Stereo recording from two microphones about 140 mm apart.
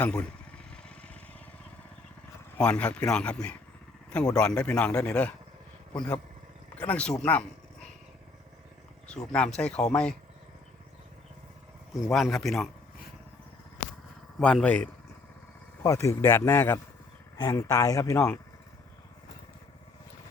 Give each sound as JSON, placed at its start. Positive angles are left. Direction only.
{"t": 0.0, "sound": "speech", "side_deg": 10}
{"t": 0.7, "sound": "vehicle", "side_deg": 5}
{"t": 2.6, "sound": "speech", "side_deg": 10}
{"t": 9.0, "sound": "speech", "side_deg": 5}
{"t": 12.1, "sound": "speech", "side_deg": 0}
{"t": 14.3, "sound": "speech", "side_deg": 5}
{"t": 15.8, "sound": "speech", "side_deg": 20}